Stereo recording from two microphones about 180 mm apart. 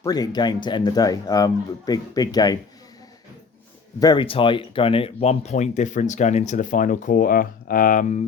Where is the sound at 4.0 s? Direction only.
25° left (ahead or behind); by 8.2 s 45° left (ahead or behind).